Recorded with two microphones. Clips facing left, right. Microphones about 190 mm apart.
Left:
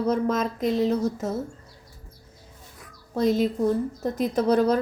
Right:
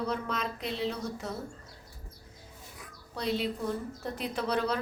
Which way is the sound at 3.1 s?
45° left (ahead or behind).